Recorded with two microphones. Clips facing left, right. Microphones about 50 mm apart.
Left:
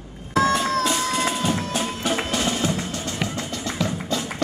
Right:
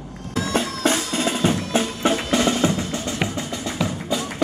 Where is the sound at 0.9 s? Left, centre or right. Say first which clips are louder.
Right 3 dB; right.